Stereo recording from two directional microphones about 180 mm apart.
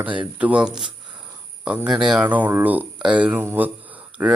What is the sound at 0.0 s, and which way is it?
Speech, 5° right (ahead or behind).